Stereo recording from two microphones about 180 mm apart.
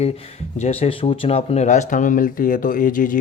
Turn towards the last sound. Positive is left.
turn(degrees=50)  # may be behind; listen again after turning